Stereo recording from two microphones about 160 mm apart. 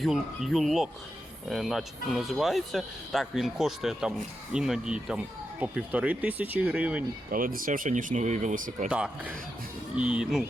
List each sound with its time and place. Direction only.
0.0 s speech: centre (ahead or behind)
7.3 s speech: 60° right (ahead or behind)
8.9 s speech: 5° right (ahead or behind)